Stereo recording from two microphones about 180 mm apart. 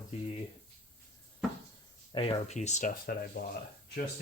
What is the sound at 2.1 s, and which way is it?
Speech, 30° left (ahead or behind).